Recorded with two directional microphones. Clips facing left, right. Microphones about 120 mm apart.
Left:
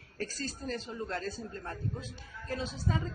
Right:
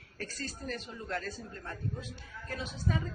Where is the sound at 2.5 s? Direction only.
30° left (ahead or behind).